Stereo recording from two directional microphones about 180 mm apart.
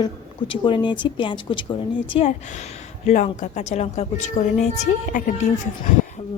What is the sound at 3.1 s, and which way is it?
A woman's voice, 40° left (ahead or behind).